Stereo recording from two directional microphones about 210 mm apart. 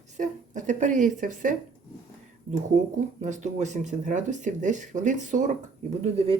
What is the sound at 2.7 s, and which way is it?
Speech, 35° right (ahead or behind).